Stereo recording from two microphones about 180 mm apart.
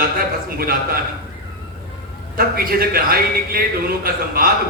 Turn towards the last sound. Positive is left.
turn(degrees=-55)  # may be behind; listen again after turning